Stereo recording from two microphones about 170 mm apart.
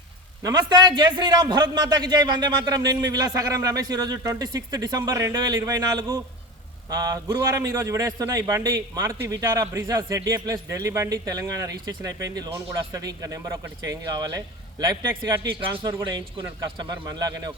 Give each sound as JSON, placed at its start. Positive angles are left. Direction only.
{"t": 0.4, "sound": "a man's voice", "side_deg": -25}